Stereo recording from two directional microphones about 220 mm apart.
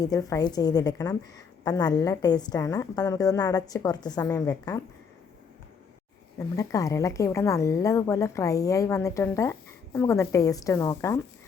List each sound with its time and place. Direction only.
0.0 s a woman's voice: 15° left (ahead or behind)
6.6 s a woman's voice: 15° left (ahead or behind)